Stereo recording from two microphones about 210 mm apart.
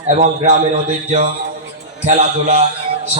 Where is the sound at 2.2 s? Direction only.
35° right (ahead or behind).